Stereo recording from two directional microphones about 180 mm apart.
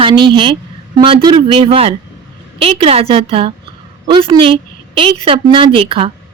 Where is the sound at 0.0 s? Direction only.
25° right (ahead or behind).